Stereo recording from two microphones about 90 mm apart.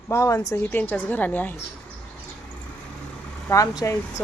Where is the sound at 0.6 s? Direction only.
25° left (ahead or behind).